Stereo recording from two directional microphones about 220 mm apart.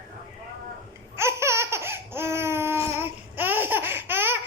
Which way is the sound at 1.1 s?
10° right (ahead or behind).